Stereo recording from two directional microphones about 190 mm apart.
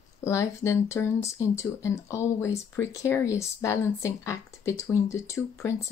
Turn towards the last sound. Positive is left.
turn(degrees=15)  # may be behind; listen again after turning